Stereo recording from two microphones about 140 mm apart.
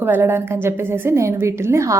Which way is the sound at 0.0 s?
15° right (ahead or behind).